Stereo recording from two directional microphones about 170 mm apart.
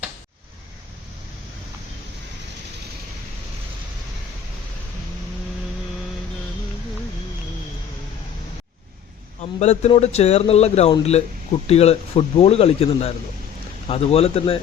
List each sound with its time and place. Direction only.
9.4 s speech: 40° left (ahead or behind)